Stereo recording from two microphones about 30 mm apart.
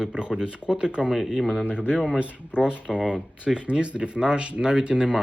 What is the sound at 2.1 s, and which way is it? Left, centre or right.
Speech, right.